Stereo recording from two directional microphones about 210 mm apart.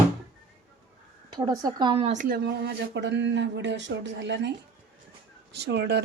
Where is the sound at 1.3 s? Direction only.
20° right (ahead or behind); by 2.4 s 35° right (ahead or behind).